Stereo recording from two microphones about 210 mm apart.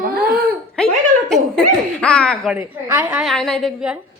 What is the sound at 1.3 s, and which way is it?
A woman's voice, 5° left (ahead or behind).